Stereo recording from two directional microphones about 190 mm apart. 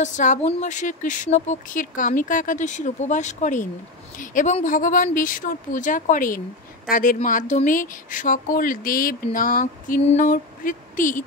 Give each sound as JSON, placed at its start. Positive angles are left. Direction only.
{"t": 0.0, "sound": "speech", "side_deg": 40}